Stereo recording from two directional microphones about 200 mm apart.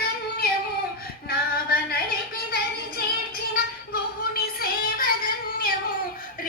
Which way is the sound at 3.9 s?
50° left (ahead or behind).